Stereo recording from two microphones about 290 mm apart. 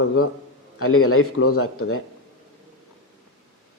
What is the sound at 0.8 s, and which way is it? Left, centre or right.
A man's voice, left.